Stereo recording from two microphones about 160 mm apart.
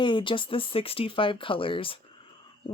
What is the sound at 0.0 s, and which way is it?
Speech, 30° left (ahead or behind).